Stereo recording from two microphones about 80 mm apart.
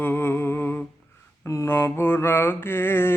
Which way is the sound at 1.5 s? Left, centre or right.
Left.